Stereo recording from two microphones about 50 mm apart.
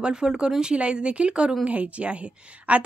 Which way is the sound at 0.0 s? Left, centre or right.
Centre.